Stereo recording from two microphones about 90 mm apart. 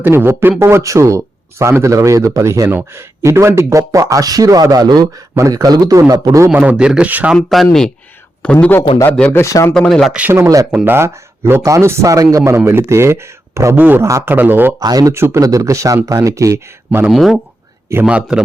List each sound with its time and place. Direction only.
0.0 s speech: 25° right (ahead or behind)
2.6 s speech: 25° right (ahead or behind); by 6.3 s 45° right (ahead or behind)
6.5 s a man's voice: 15° right (ahead or behind)
7.5 s a man's voice: 5° left (ahead or behind)
9.3 s speech: 35° left (ahead or behind)
9.7 s speech: 5° left (ahead or behind)
10.1 s a man's voice: 15° right (ahead or behind)
10.8 s speech: 25° right (ahead or behind)
13.7 s speech: 20° right (ahead or behind)
14.0 s speech: 35° right (ahead or behind)
14.3 s speech: 20° right (ahead or behind)
14.8 s speech: 45° right (ahead or behind)
15.1 s speech: 30° right (ahead or behind)
17.1 s a man's voice: centre (ahead or behind)